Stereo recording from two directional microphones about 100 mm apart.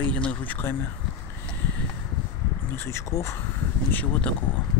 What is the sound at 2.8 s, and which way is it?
Speech, 30° left (ahead or behind).